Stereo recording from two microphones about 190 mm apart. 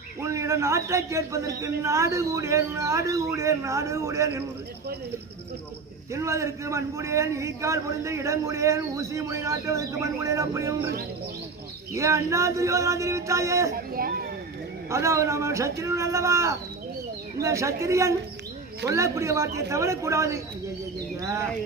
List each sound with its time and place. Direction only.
0.2 s a man's voice: 15° right (ahead or behind)
6.1 s a man's voice: 15° right (ahead or behind)
11.9 s a man's voice: 15° right (ahead or behind)
13.7 s speech: 50° right (ahead or behind)
14.8 s a man's voice: 15° right (ahead or behind)